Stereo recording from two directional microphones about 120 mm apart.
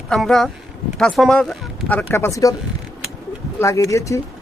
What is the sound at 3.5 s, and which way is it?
Speech, 25° left (ahead or behind).